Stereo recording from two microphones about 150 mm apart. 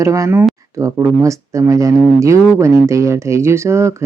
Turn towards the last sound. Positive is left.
turn(degrees=-20)  # may be behind; listen again after turning